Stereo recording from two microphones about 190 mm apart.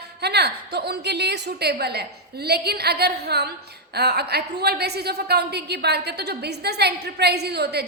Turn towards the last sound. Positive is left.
turn(degrees=-60)  # may be behind; listen again after turning